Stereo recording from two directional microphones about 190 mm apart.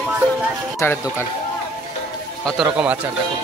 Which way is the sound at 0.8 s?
15° left (ahead or behind).